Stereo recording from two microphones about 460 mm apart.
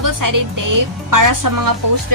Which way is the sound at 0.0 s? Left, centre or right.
Right.